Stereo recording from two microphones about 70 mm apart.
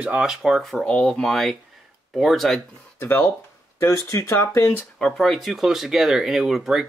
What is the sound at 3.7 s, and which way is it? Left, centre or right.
Speech, left.